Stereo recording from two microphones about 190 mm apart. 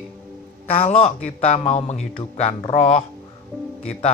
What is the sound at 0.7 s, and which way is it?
Speech, 30° left (ahead or behind).